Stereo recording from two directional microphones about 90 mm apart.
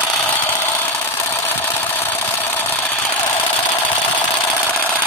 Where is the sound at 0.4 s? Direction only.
25° left (ahead or behind).